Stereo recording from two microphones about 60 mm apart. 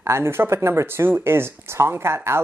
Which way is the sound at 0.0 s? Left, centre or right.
Right.